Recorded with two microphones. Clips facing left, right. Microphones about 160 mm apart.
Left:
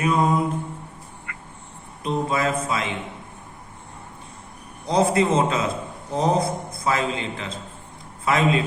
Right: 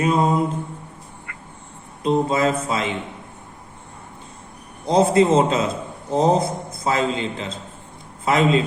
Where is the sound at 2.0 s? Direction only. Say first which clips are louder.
Right 5 dB; 30° right (ahead or behind).